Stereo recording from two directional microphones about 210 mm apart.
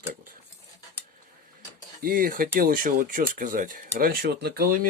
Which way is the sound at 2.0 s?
45° right (ahead or behind).